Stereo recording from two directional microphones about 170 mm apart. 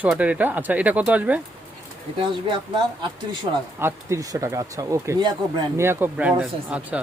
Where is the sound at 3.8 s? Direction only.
15° right (ahead or behind).